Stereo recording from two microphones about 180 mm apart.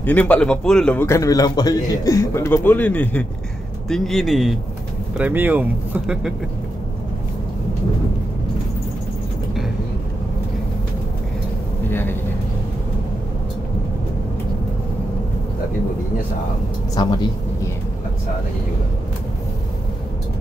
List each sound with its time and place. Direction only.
0.0 s a man's voice: 10° left (ahead or behind)
11.9 s vehicle: 10° left (ahead or behind)
17.0 s speech: 25° left (ahead or behind)